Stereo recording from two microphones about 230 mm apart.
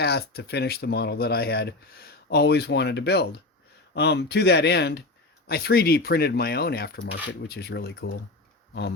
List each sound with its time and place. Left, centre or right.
0.0 s speech: left